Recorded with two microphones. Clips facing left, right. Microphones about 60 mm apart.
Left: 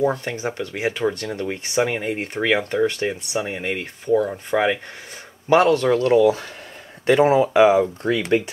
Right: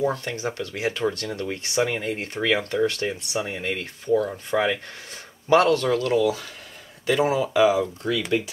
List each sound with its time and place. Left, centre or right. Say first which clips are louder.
0.0 s speech: left 3 dB; left
4.1 s speech: left 3 dB; centre
5.5 s speech: left 3 dB; left